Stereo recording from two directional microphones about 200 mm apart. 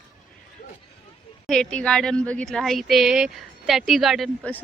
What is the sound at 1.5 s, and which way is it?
Speech, 5° left (ahead or behind).